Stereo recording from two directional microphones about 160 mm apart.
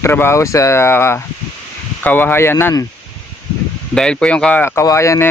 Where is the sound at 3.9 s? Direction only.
5° left (ahead or behind).